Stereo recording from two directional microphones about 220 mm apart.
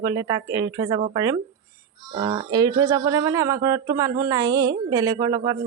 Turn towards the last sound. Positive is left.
turn(degrees=-15)  # may be behind; listen again after turning